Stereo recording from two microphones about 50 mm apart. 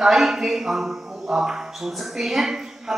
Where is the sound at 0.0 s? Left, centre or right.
Centre.